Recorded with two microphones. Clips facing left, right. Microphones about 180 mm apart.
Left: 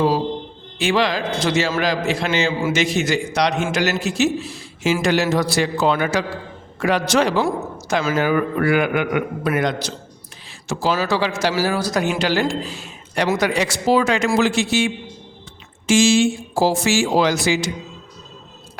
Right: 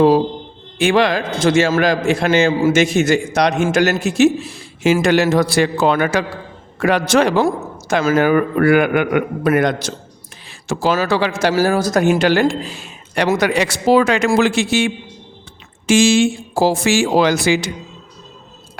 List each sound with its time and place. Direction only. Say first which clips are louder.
0.8 s a man's voice: right 4 dB; 55° right (ahead or behind)
15.9 s speech: right 2 dB; 60° right (ahead or behind)